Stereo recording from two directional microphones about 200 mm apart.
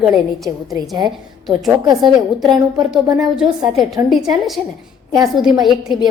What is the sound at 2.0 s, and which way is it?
A woman's voice, centre (ahead or behind).